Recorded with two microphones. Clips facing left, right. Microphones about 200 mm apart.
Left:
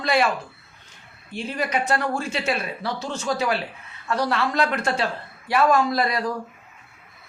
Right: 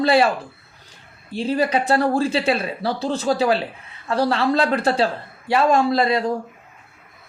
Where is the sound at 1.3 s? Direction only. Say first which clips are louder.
Right 6 dB; 30° right (ahead or behind).